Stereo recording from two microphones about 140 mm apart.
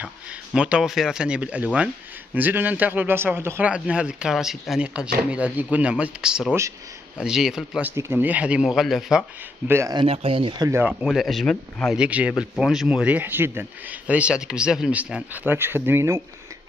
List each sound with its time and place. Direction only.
0.0 s speech: 5° right (ahead or behind)
7.9 s speech: 20° right (ahead or behind); by 9.2 s centre (ahead or behind)
9.7 s speech: 20° right (ahead or behind)
9.9 s speech: 40° right (ahead or behind)
10.6 s speech: 20° right (ahead or behind)
10.9 s speech: 5° right (ahead or behind)
12.0 s speech: 10° right (ahead or behind)